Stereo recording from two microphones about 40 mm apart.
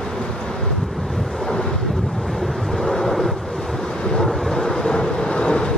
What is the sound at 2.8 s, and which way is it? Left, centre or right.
Wind noise, centre.